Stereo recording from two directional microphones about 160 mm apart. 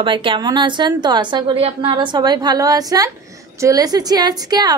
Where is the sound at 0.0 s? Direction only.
30° right (ahead or behind).